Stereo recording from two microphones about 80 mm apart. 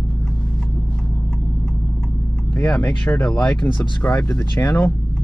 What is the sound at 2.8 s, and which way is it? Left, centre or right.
Speech, centre.